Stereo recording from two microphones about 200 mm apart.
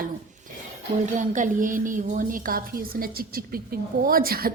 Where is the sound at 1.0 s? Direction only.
40° right (ahead or behind).